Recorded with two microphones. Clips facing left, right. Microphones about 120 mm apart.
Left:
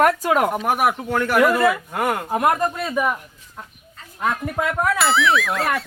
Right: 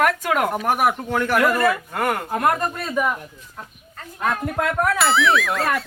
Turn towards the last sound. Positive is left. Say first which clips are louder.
# even
turn(degrees=0)  # may be behind; listen again after turning